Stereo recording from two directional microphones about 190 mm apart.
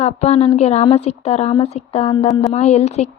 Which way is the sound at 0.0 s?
35° left (ahead or behind).